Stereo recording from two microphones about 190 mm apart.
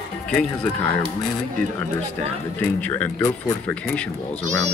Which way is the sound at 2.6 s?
10° left (ahead or behind).